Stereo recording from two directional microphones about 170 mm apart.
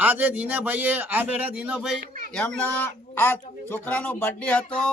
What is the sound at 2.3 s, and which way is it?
A man's voice, 10° left (ahead or behind).